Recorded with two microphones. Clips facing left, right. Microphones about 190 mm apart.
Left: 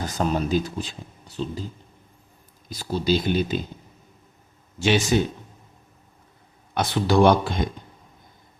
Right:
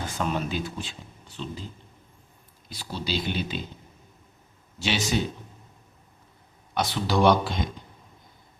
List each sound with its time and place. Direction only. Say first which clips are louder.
0.0 s speech: left 4 dB; 40° left (ahead or behind)
2.6 s speech: left 9 dB; 45° left (ahead or behind)
4.8 s speech: left 6 dB; 50° left (ahead or behind)
6.7 s speech: left 5 dB; 50° left (ahead or behind)